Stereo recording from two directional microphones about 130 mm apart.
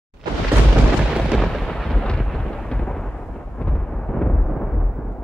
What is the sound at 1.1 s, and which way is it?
Thunder, 5° right (ahead or behind).